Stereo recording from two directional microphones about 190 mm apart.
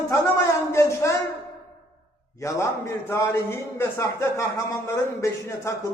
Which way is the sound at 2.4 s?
15° left (ahead or behind).